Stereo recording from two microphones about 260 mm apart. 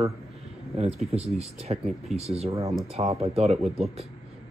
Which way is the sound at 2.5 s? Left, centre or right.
Centre.